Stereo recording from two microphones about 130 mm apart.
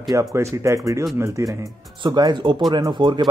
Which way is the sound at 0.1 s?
25° right (ahead or behind).